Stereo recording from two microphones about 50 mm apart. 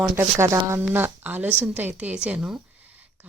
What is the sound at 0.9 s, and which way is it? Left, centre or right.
A woman's voice, right.